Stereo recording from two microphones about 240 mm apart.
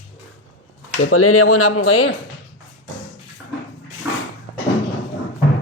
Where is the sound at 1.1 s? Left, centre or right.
Left.